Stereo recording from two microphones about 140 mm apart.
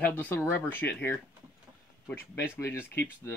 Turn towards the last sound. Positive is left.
turn(degrees=15)  # may be behind; listen again after turning